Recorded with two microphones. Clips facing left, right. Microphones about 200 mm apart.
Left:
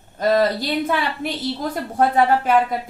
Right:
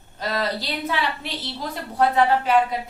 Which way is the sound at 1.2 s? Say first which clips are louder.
Left 7 dB; 50° left (ahead or behind).